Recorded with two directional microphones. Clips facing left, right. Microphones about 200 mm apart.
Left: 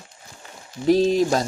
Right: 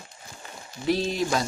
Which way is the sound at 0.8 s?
40° left (ahead or behind).